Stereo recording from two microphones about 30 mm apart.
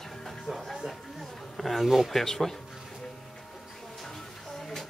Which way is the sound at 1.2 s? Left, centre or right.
Centre.